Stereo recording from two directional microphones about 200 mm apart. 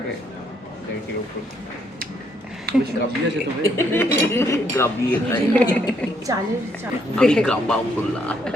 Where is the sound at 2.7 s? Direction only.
50° right (ahead or behind).